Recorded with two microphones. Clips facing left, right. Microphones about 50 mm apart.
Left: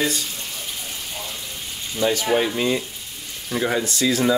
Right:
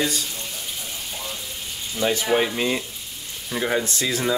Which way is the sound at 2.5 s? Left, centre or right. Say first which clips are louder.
Left 2 dB; centre.